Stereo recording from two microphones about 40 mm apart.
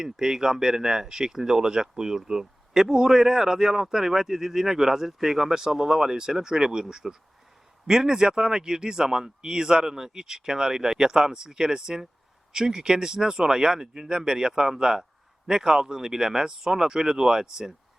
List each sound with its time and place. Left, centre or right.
0.0 s speech: centre